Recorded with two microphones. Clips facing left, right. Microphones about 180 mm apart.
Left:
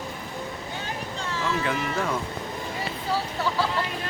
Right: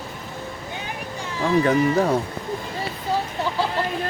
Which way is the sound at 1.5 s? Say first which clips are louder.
Right 10 dB; 40° right (ahead or behind).